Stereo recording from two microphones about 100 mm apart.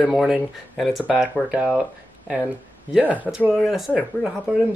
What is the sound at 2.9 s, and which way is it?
Speech, 15° right (ahead or behind).